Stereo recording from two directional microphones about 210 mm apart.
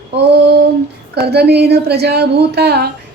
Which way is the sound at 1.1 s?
50° right (ahead or behind).